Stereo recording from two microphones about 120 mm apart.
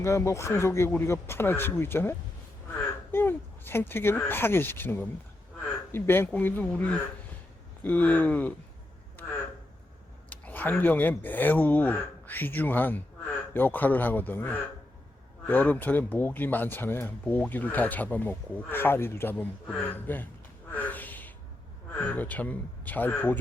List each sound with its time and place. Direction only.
0.0 s speech: 25° left (ahead or behind)
9.2 s a sound: 20° left (ahead or behind)
10.2 s speech: 10° left (ahead or behind)
20.7 s gasp: 15° left (ahead or behind)
21.9 s speech: 15° left (ahead or behind)